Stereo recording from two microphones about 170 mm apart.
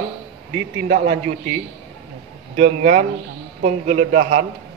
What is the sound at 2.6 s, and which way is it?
A man's voice, 45° right (ahead or behind).